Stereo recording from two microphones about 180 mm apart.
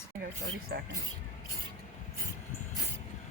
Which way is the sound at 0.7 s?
70° right (ahead or behind).